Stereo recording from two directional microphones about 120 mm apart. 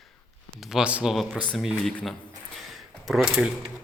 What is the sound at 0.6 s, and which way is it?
Speech, 5° right (ahead or behind).